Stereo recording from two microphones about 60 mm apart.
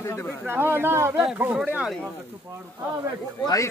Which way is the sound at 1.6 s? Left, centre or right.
Centre.